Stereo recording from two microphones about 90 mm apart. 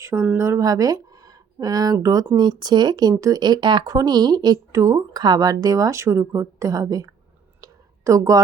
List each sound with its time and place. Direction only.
0.0 s speech: 30° right (ahead or behind)
2.3 s speech: 50° right (ahead or behind)
4.8 s a woman's voice: 35° right (ahead or behind)
5.1 s a woman's voice: 50° right (ahead or behind)
7.6 s a sound: 35° right (ahead or behind)